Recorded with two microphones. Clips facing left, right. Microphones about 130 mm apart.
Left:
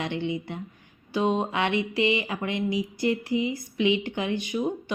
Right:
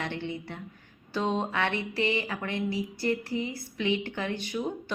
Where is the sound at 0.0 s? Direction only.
15° left (ahead or behind).